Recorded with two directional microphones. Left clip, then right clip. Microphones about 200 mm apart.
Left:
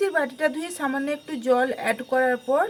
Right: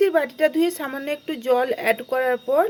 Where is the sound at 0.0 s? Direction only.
30° right (ahead or behind).